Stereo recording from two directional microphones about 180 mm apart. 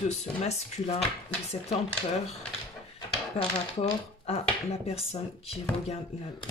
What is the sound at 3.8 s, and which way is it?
Speech, 35° left (ahead or behind).